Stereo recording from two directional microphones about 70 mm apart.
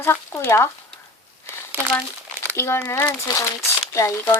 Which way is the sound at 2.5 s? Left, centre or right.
Left.